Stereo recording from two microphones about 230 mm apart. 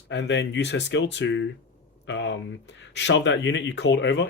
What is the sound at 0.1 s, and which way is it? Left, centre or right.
Speech, left.